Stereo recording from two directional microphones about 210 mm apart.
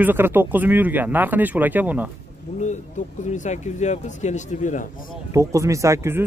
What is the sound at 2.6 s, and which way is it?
Speech, 35° left (ahead or behind).